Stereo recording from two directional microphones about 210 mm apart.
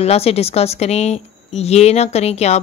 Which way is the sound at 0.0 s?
30° left (ahead or behind).